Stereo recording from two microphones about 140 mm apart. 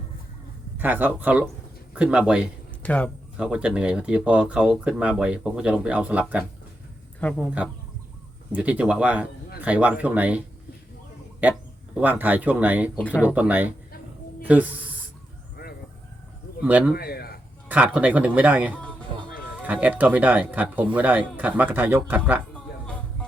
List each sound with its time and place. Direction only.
0.8 s speech: 10° right (ahead or behind)
2.8 s speech: 10° left (ahead or behind)
3.3 s speech: 5° right (ahead or behind)
7.2 s speech: 10° left (ahead or behind)
8.5 s speech: 10° right (ahead or behind)
11.9 s speech: 10° right (ahead or behind)
16.6 s speech: 10° right (ahead or behind)
16.9 s a man's voice: 90° left
17.7 s speech: 10° right (ahead or behind)